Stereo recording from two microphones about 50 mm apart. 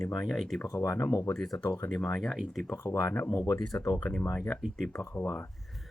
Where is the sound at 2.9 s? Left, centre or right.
Left.